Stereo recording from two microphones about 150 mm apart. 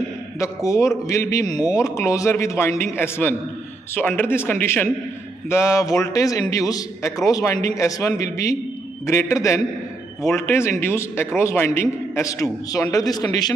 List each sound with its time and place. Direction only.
0.4 s a man's voice: 20° left (ahead or behind)